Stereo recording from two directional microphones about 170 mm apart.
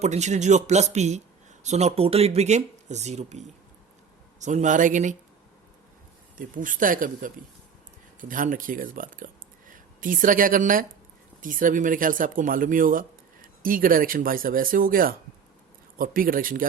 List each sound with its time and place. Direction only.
0.0 s speech: 40° right (ahead or behind)
6.3 s speech: 50° right (ahead or behind)